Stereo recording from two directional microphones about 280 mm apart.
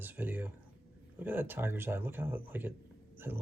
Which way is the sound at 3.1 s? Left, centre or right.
Centre.